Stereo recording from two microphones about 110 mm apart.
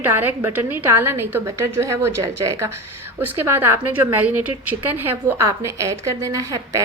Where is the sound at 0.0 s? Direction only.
15° right (ahead or behind).